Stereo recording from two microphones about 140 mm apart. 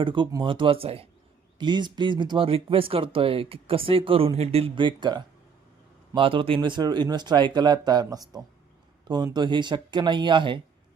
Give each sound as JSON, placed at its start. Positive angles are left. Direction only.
{"t": 0.0, "sound": "speech", "side_deg": -35}